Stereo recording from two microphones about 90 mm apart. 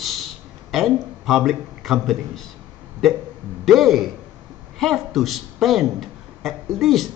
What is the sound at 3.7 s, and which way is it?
A man's voice, centre (ahead or behind).